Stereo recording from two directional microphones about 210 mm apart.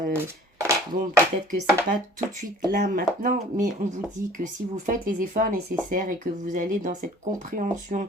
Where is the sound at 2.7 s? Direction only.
45° right (ahead or behind).